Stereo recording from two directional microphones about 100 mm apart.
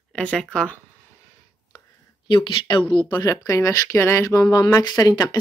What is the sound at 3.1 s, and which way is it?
Speech, 35° left (ahead or behind).